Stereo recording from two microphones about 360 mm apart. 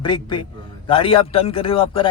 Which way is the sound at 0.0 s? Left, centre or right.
Centre.